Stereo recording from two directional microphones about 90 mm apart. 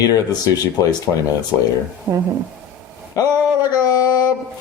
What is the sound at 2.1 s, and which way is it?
Speech, 50° right (ahead or behind).